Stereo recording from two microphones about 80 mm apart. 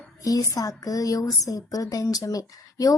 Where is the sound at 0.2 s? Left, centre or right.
Left.